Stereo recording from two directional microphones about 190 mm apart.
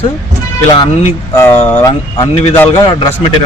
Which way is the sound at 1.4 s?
10° left (ahead or behind).